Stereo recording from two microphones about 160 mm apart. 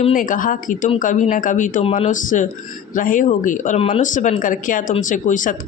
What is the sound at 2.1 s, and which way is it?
A woman's voice, 55° left (ahead or behind).